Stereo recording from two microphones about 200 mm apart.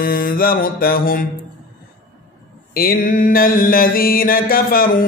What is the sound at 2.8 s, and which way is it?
Mantra, 45° left (ahead or behind).